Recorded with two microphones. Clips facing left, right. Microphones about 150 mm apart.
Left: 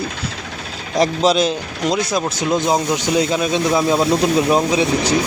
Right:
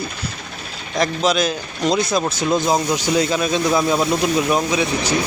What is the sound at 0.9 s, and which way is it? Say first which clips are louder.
Speech: left 3 dB; 30° left (ahead or behind).